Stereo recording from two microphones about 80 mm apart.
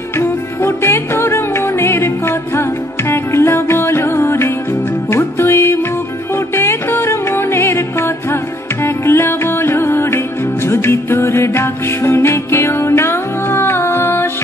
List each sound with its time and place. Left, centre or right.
0.2 s music: left